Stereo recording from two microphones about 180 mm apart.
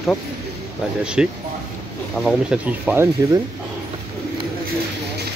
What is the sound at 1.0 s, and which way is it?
Speech, 5° right (ahead or behind).